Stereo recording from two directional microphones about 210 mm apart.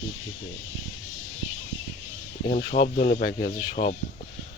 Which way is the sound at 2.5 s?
55° left (ahead or behind).